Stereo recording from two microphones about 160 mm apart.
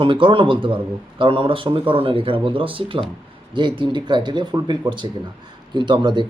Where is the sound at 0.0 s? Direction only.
30° right (ahead or behind).